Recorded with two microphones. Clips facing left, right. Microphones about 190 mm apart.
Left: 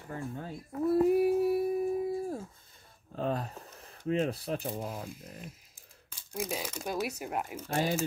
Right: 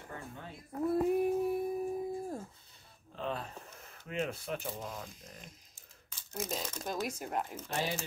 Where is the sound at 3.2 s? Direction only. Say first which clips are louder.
Left 5 dB; 40° left (ahead or behind).